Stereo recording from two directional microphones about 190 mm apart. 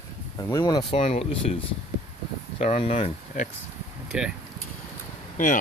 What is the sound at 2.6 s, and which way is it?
Speech, 35° left (ahead or behind).